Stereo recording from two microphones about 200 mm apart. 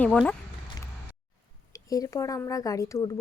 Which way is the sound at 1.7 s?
15° left (ahead or behind).